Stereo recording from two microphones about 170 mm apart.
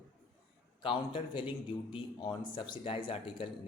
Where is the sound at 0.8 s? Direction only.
30° left (ahead or behind).